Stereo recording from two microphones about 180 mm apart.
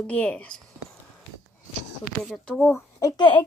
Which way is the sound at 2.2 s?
Centre (ahead or behind).